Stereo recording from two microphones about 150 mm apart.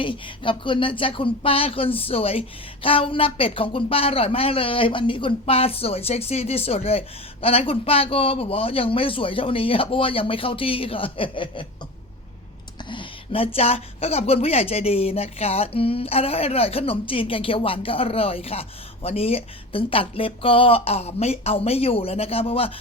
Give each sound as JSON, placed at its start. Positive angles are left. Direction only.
{"t": 0.0, "sound": "speech", "side_deg": 35}
{"t": 12.9, "sound": "speech", "side_deg": 35}